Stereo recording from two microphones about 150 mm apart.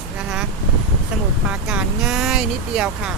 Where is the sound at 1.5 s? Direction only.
5° right (ahead or behind).